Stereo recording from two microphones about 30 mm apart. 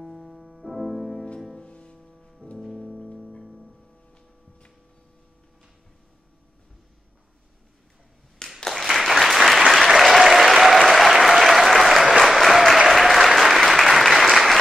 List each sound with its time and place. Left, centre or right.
0.0 s music: centre
1.6 s music: left
2.6 s music: centre
8.4 s a sound: left
8.7 s applause: centre